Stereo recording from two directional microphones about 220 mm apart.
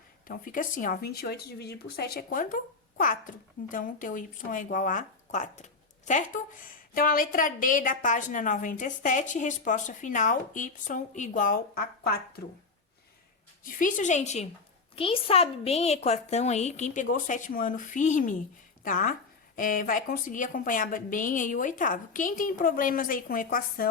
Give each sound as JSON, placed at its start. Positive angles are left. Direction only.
{"t": 0.3, "sound": "speech", "side_deg": 40}
{"t": 13.7, "sound": "speech", "side_deg": 40}